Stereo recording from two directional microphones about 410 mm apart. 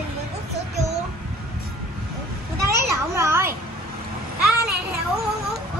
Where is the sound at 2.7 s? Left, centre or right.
Centre.